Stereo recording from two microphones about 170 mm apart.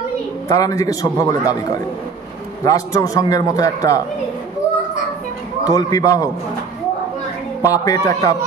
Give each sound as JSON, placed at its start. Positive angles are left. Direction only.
{"t": 0.5, "sound": "a man's voice", "side_deg": 20}
{"t": 2.6, "sound": "a man's voice", "side_deg": 20}
{"t": 5.6, "sound": "a man's voice", "side_deg": 20}
{"t": 7.6, "sound": "a man's voice", "side_deg": 20}